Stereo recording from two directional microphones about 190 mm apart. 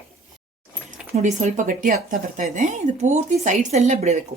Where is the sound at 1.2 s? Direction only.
40° right (ahead or behind).